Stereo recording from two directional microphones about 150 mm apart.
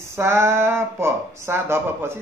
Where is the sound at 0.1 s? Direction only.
15° right (ahead or behind).